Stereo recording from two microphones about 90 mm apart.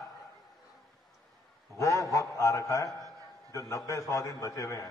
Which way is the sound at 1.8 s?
35° left (ahead or behind).